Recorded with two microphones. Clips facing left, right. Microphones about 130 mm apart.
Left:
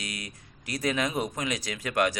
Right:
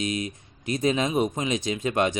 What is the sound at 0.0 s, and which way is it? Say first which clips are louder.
A man's voice: right 11 dB; 25° right (ahead or behind).